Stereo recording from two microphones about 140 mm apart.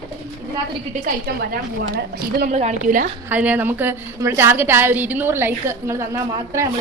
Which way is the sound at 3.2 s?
10° right (ahead or behind).